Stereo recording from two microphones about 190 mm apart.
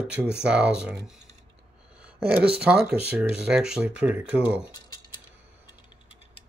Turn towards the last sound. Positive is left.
turn(degrees=30)  # may be behind; listen again after turning